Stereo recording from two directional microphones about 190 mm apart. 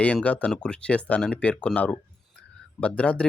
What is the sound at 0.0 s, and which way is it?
Speech, 5° left (ahead or behind).